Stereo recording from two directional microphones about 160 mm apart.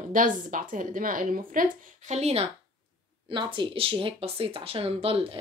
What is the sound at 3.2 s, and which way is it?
Speech, 30° right (ahead or behind).